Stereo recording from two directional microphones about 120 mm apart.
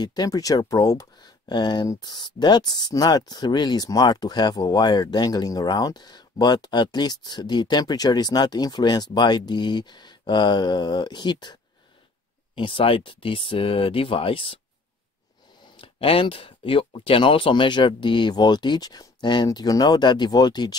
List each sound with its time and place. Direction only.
0.0 s speech: 35° left (ahead or behind)
12.5 s speech: 45° left (ahead or behind)
15.6 s speech: 45° left (ahead or behind)